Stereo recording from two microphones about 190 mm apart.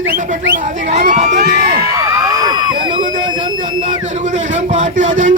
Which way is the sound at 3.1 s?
40° right (ahead or behind).